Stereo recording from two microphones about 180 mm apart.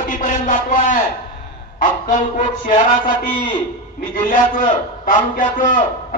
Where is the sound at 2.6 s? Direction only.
45° left (ahead or behind).